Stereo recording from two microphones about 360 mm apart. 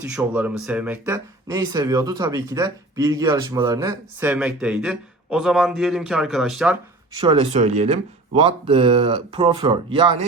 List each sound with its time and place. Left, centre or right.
0.0 s speech: centre
7.2 s speech: centre